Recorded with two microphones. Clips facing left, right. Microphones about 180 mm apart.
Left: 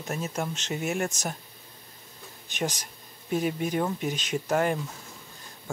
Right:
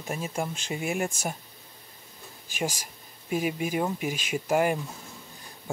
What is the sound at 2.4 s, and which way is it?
Speech, 5° right (ahead or behind).